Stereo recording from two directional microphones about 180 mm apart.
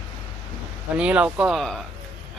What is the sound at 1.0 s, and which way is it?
Speech, 5° right (ahead or behind).